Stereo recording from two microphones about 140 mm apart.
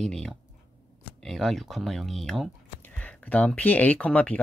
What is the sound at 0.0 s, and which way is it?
Speech, centre (ahead or behind).